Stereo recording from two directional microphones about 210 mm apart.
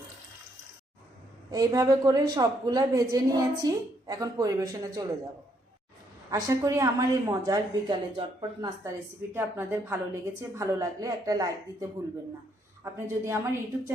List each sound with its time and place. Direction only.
1.5 s a woman's voice: 15° right (ahead or behind)
6.3 s a woman's voice: 15° right (ahead or behind)